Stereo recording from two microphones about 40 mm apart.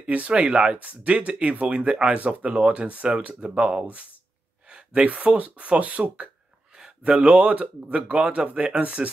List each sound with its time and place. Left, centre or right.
0.0 s speech: right
2.1 s speech: right
2.5 s speech: right
4.6 s a sound: right
5.0 s speech: right